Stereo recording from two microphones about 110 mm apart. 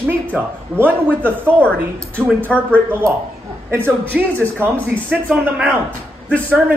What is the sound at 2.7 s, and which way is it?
A man's voice, 20° right (ahead or behind).